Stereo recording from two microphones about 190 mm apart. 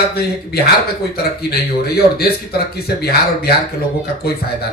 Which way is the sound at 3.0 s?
55° left (ahead or behind).